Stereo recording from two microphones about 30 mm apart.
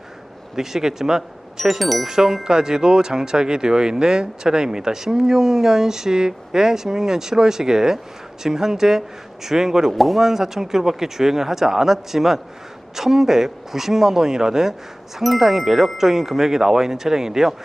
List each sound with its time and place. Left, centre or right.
0.5 s speech: centre
1.6 s speech: centre
2.0 s speech: centre
9.9 s speech: centre
10.2 s speech: centre
15.2 s speech: centre